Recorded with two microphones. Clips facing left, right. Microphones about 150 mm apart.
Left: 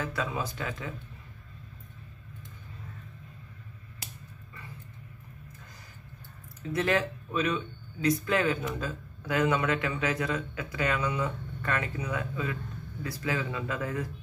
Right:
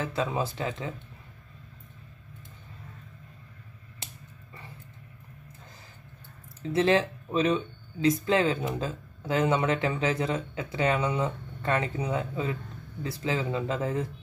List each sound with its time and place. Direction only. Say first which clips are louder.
0.0 s speech: right 3 dB; 25° right (ahead or behind)
6.7 s speech: right 4 dB; 25° right (ahead or behind)